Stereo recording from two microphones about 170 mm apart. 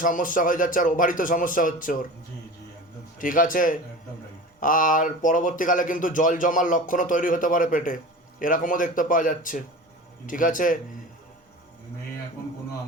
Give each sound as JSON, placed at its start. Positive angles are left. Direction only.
{"t": 0.0, "sound": "speech", "side_deg": 50}
{"t": 3.2, "sound": "speech", "side_deg": 55}